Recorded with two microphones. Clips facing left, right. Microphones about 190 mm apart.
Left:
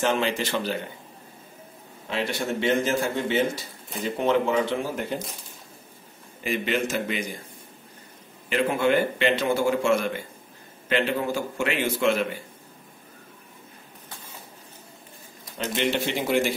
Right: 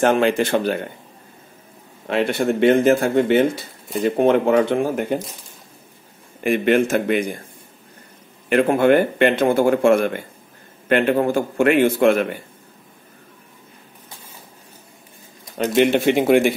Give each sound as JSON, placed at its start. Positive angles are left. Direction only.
{"t": 0.0, "sound": "speech", "side_deg": -55}
{"t": 2.0, "sound": "speech", "side_deg": -55}
{"t": 6.4, "sound": "speech", "side_deg": -55}
{"t": 8.5, "sound": "speech", "side_deg": -55}
{"t": 15.5, "sound": "speech", "side_deg": -55}